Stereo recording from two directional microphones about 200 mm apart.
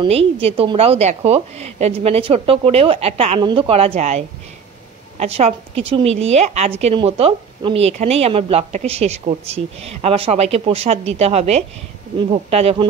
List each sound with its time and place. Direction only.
0.0 s a woman's voice: 30° right (ahead or behind)